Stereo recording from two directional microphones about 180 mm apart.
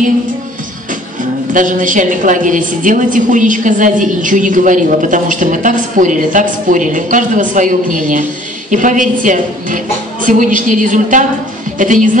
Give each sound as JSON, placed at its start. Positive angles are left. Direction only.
{"t": 1.5, "sound": "a woman's voice", "side_deg": -45}